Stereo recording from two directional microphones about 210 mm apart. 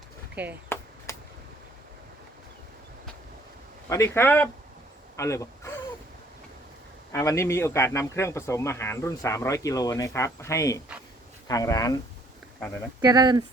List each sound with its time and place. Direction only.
3.8 s speech: 15° left (ahead or behind)
5.1 s a sound: 15° left (ahead or behind)
7.1 s speech: 15° left (ahead or behind)
13.0 s speech: 20° right (ahead or behind)